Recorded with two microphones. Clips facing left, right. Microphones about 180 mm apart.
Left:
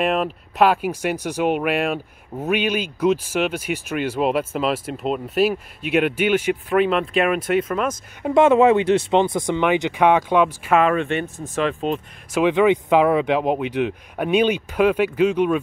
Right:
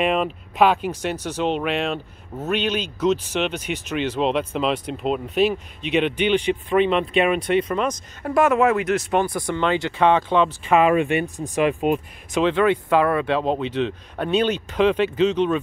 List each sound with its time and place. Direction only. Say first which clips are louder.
0.0 s speech: even; centre (ahead or behind)
8.2 s speech: left 4 dB; 25° left (ahead or behind)
10.8 s speech: right 3 dB; 10° right (ahead or behind)
12.4 s speech: left 2 dB; 15° left (ahead or behind)